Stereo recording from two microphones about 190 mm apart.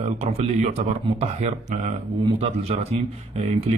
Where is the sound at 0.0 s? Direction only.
35° right (ahead or behind).